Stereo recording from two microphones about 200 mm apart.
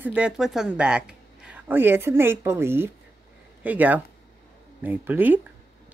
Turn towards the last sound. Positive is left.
turn(degrees=-10)  # may be behind; listen again after turning